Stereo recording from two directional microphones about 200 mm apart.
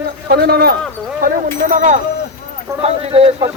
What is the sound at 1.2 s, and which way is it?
A man's voice, 40° right (ahead or behind).